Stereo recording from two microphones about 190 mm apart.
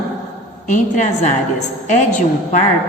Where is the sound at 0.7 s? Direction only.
40° left (ahead or behind).